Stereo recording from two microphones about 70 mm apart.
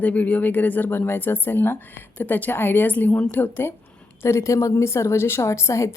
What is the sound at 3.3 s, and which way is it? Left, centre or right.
A woman's voice, left.